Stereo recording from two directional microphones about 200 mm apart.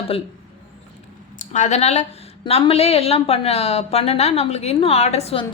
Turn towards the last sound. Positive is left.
turn(degrees=30)  # may be behind; listen again after turning